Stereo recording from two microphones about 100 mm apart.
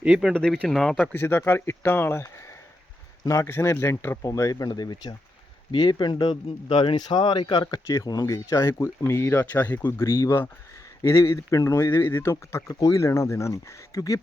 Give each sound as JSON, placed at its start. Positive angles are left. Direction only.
{"t": 0.0, "sound": "speech", "side_deg": -5}
{"t": 0.3, "sound": "speech", "side_deg": 10}
{"t": 1.1, "sound": "speech", "side_deg": 20}